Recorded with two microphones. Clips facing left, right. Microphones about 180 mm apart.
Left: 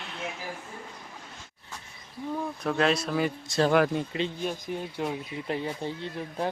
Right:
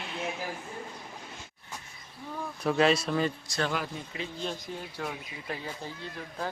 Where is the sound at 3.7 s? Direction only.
65° left (ahead or behind).